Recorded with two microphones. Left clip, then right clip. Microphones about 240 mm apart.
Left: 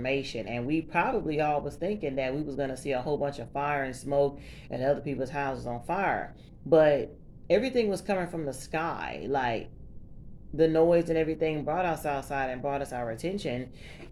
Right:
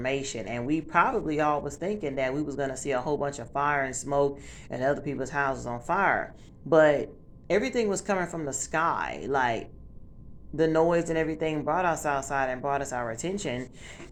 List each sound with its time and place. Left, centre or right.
0.0 s speech: centre